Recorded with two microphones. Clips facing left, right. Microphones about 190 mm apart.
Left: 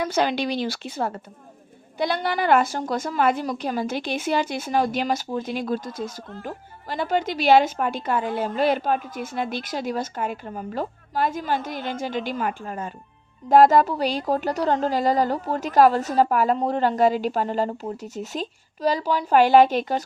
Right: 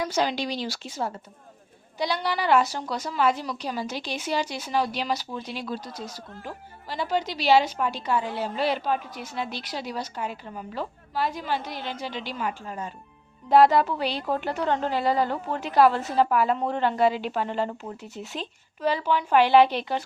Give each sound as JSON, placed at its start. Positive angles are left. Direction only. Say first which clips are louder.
{"t": 0.0, "sound": "a woman's voice", "louder": "left 3 dB", "side_deg": 55}